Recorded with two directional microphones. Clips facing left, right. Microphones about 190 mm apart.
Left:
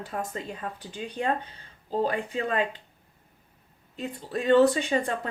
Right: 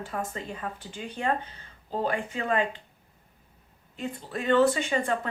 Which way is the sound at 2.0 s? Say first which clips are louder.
Left 1 dB; 35° left (ahead or behind).